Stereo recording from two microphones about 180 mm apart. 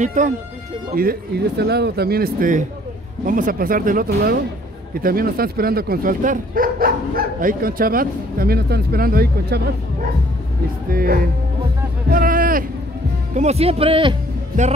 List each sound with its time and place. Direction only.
0.0 s speech: 45° right (ahead or behind)
1.6 s speech: 65° right (ahead or behind)
10.9 s speech: 55° right (ahead or behind)
12.1 s a sound: 50° right (ahead or behind)
13.3 s speech: 40° right (ahead or behind)